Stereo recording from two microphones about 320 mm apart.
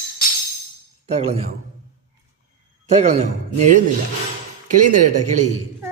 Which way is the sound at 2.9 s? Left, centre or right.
Right.